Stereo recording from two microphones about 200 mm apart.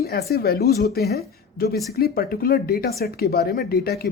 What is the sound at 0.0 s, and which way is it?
A woman's voice, 55° left (ahead or behind).